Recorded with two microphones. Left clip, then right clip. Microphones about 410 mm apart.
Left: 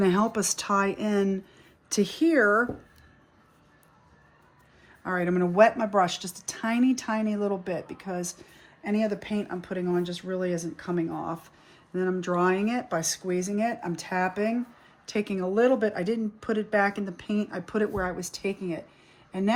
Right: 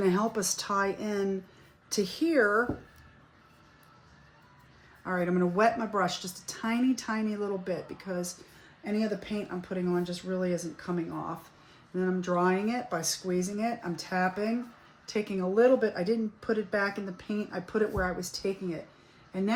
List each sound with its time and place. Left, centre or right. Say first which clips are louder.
0.0 s speech: left 3 dB; left
5.0 s speech: left 3 dB; left